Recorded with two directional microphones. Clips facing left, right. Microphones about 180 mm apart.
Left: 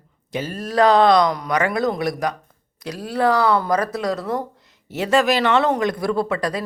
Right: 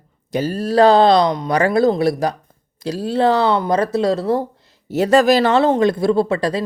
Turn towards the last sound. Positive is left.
turn(degrees=-25)  # may be behind; listen again after turning